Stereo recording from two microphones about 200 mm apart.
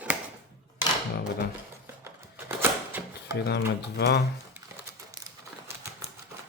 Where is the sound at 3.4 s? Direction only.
55° left (ahead or behind).